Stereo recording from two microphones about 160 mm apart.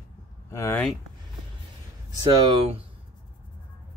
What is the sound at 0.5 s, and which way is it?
Speech, 15° left (ahead or behind).